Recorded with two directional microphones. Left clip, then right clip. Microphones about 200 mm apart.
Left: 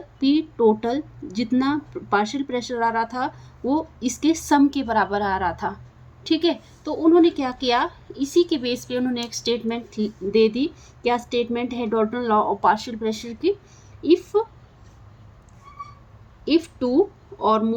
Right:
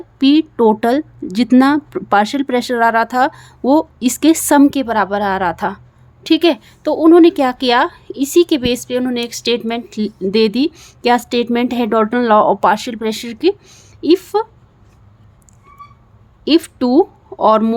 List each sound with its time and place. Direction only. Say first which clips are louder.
0.2 s a woman's voice: right 7 dB; 50° right (ahead or behind)
16.4 s a woman's voice: right 7 dB; 55° right (ahead or behind)